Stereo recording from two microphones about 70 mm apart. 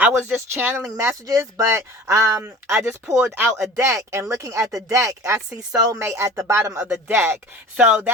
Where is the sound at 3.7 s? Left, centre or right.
Right.